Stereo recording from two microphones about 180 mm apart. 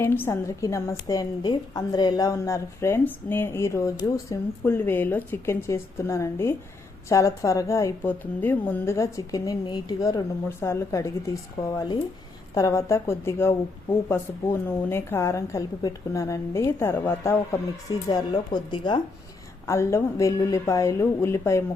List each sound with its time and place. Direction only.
0.0 s a woman's voice: 15° left (ahead or behind)